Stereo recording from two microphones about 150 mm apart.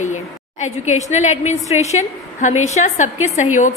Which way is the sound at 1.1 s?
50° left (ahead or behind).